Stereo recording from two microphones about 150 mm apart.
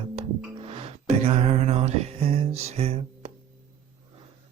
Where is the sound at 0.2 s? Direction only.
40° right (ahead or behind).